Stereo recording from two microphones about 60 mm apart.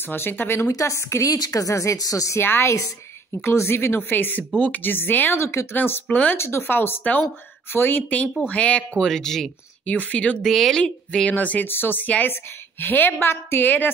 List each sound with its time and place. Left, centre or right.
0.1 s speech: left
0.7 s a woman's voice: left
1.3 s speech: left
2.3 s speech: left
4.6 s speech: left
4.8 s speech: left
5.7 s speech: left
6.0 s speech: left
6.3 s speech: left; by 9.0 s centre
9.0 s speech: centre
9.8 s speech: left
10.4 s speech: centre
11.2 s speech: left